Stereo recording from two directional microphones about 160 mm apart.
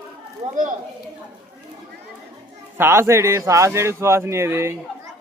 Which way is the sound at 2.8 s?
15° right (ahead or behind).